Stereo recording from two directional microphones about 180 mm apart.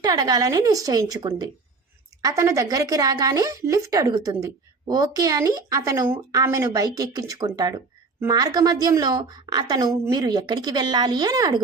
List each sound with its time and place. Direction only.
0.0 s speech: 20° right (ahead or behind)